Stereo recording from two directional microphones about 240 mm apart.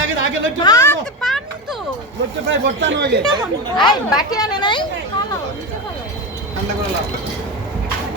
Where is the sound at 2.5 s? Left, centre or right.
Right.